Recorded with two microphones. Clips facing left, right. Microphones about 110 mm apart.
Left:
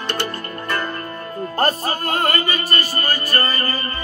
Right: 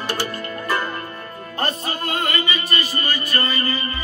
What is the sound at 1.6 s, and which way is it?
Music, 40° left (ahead or behind).